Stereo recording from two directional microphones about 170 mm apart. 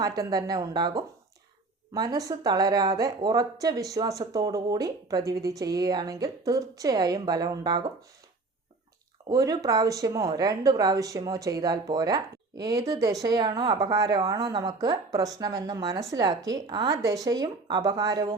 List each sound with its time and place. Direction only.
0.0 s speech: 20° right (ahead or behind)
9.3 s speech: 20° right (ahead or behind)